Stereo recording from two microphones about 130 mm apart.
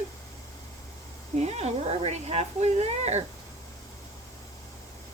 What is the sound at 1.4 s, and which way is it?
Speech, 55° right (ahead or behind).